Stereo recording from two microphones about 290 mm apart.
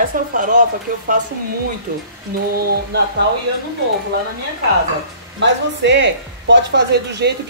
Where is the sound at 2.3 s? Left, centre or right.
Right.